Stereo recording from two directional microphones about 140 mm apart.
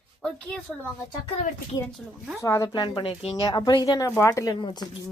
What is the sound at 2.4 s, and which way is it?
Speech, 20° left (ahead or behind).